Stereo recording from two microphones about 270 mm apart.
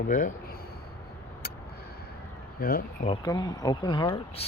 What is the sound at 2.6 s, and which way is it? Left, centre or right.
Speech, left.